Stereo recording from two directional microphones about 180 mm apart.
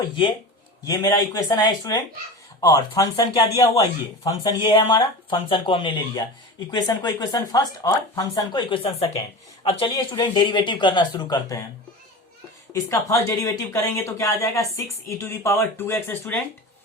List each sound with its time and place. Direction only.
0.0 s speech: 25° left (ahead or behind)
12.7 s speech: 15° left (ahead or behind)